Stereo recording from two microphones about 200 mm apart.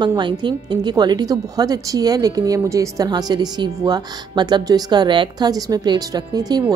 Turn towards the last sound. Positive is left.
turn(degrees=-20)  # may be behind; listen again after turning